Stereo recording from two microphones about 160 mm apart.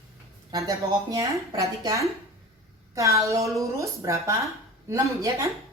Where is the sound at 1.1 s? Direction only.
20° right (ahead or behind).